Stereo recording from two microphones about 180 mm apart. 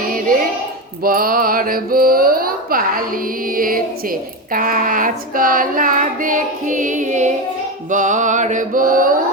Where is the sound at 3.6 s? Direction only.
50° right (ahead or behind).